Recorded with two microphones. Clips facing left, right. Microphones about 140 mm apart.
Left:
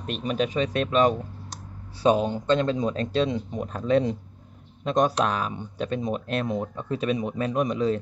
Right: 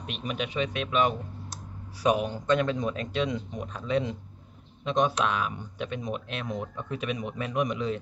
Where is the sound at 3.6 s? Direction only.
45° left (ahead or behind).